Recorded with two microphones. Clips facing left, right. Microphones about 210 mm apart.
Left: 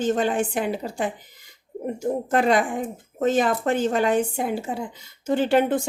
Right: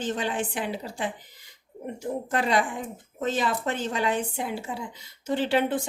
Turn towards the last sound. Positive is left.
turn(degrees=45)  # may be behind; listen again after turning